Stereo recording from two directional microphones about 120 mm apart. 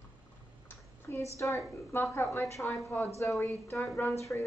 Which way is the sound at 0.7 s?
20° left (ahead or behind).